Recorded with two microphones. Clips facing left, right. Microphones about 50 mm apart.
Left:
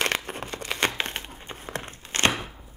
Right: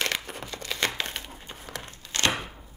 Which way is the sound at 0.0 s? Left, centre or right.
Left.